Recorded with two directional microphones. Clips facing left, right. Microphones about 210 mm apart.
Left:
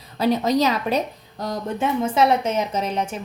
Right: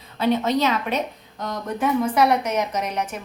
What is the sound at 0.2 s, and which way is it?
A woman's voice, 40° left (ahead or behind).